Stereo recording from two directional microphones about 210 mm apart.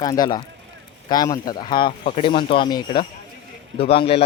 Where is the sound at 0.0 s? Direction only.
20° left (ahead or behind).